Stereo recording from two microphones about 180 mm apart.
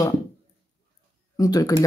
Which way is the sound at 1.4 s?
20° left (ahead or behind).